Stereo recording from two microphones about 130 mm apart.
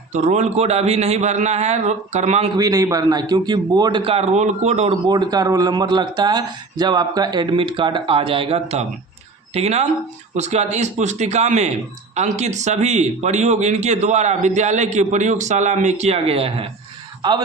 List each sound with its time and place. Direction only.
0.1 s speech: 65° right (ahead or behind)
2.6 s speech: 30° right (ahead or behind)
4.0 s speech: 50° right (ahead or behind)
5.0 s speech: 30° right (ahead or behind); by 16.6 s 50° right (ahead or behind)